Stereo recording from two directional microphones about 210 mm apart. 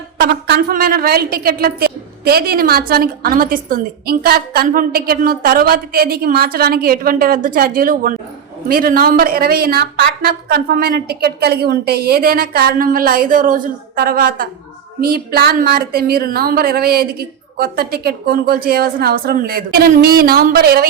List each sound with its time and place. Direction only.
0.2 s a woman's voice: 45° right (ahead or behind)